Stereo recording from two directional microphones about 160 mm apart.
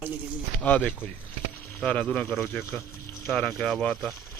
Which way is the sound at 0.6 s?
10° left (ahead or behind).